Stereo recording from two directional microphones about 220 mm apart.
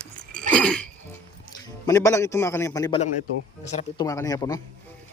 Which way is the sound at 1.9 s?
15° left (ahead or behind).